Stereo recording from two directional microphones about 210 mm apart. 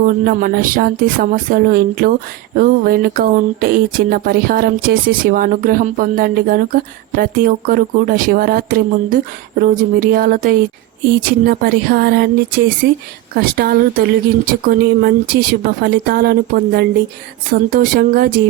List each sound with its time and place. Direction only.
0.0 s speech: 40° right (ahead or behind)